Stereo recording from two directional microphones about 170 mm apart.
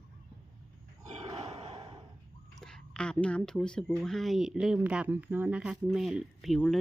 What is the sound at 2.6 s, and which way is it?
Speech, 5° left (ahead or behind).